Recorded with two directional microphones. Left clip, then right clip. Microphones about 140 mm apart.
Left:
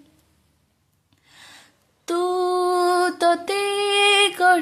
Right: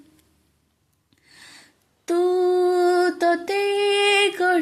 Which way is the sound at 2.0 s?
10° left (ahead or behind).